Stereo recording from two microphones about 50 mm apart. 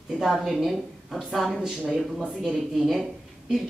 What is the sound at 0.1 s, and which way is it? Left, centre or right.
A woman's voice, centre.